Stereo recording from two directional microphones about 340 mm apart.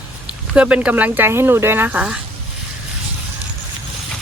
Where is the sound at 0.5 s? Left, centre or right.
Centre.